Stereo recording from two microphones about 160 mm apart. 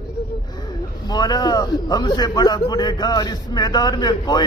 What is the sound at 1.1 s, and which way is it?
A man's voice, 25° left (ahead or behind).